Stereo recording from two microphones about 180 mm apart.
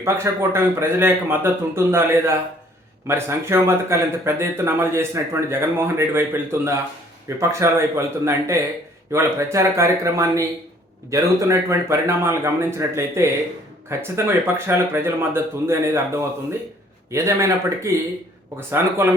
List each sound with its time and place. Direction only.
0.0 s speech: 15° right (ahead or behind)